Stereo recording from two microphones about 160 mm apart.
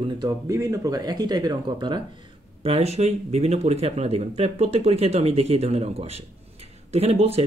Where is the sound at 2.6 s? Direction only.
40° right (ahead or behind).